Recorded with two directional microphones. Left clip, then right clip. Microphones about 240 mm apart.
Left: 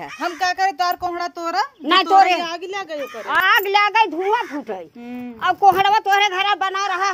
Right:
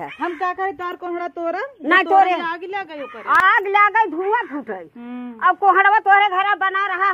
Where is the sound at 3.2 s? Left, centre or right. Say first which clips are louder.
Right 2 dB; centre.